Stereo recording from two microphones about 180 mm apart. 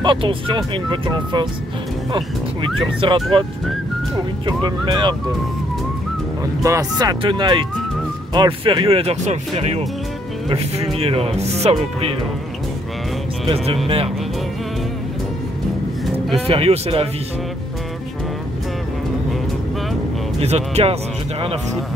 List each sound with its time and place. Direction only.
0.0 s speech: 30° right (ahead or behind)
3.0 s speech: 30° right (ahead or behind)
4.5 s speech: 25° right (ahead or behind)
6.6 s speech: 20° right (ahead or behind); by 11.7 s 35° right (ahead or behind)
13.8 s speech: 30° right (ahead or behind)
16.4 s speech: 35° right (ahead or behind)
20.3 s speech: 35° right (ahead or behind)